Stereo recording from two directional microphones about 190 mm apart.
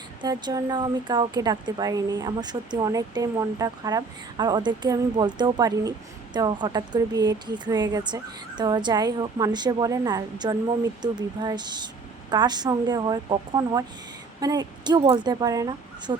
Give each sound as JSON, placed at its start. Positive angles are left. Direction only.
{"t": 0.2, "sound": "speech", "side_deg": -20}